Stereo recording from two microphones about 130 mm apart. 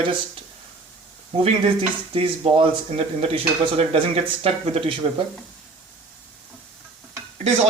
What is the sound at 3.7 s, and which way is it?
Speech, 50° right (ahead or behind).